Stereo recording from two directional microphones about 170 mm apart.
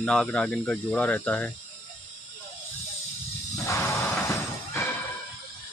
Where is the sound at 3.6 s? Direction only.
15° left (ahead or behind).